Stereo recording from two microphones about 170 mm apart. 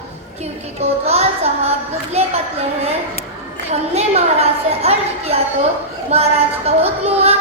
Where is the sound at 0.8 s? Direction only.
40° right (ahead or behind).